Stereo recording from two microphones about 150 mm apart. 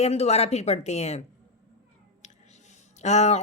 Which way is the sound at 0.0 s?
45° left (ahead or behind).